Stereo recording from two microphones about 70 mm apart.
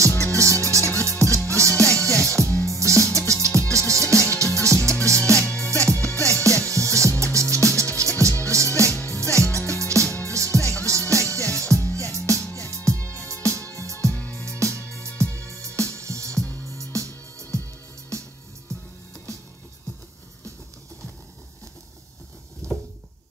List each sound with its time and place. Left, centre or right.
0.3 s music: right
5.4 s music: left
5.7 s music: right
14.1 s music: left
14.9 s music: right
22.6 s a sound: right